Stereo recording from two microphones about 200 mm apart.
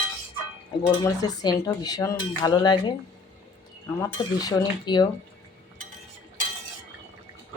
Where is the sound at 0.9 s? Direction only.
20° left (ahead or behind).